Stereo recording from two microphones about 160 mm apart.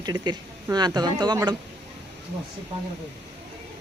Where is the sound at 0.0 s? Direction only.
25° right (ahead or behind).